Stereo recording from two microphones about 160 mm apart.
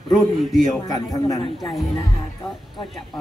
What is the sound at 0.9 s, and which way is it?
Speech, 25° left (ahead or behind).